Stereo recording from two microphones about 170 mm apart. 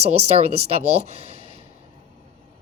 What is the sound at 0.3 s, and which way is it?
Speech, 40° right (ahead or behind).